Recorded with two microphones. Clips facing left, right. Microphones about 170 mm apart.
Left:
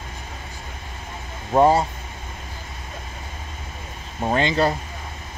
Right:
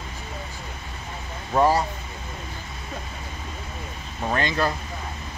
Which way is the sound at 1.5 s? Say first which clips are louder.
Left 4 dB; 25° left (ahead or behind).